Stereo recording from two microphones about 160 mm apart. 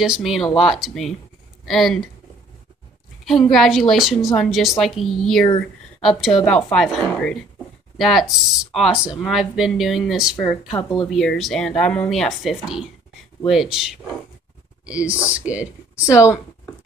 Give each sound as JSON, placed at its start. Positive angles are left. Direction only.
{"t": 0.0, "sound": "a woman's voice", "side_deg": 0}
{"t": 3.3, "sound": "a woman's voice", "side_deg": 0}
{"t": 16.1, "sound": "speech", "side_deg": 20}